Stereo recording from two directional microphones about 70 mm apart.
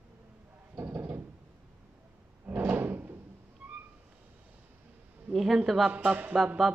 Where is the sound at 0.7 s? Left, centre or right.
Right.